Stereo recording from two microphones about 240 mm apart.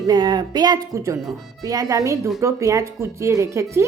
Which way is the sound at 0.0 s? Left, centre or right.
Centre.